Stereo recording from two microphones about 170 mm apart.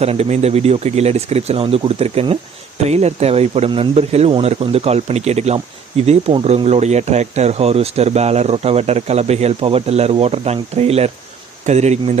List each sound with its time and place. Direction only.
0.0 s speech: 40° right (ahead or behind)